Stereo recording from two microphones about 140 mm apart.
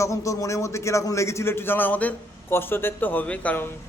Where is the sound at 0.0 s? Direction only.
20° left (ahead or behind).